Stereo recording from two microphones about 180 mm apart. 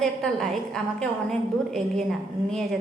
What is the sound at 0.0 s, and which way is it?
A woman's voice, centre (ahead or behind).